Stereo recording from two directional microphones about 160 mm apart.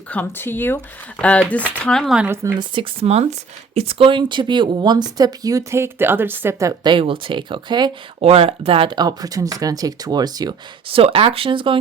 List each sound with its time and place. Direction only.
0.1 s speech: 10° left (ahead or behind)
2.2 s speech: 15° right (ahead or behind)
2.6 s speech: 35° right (ahead or behind)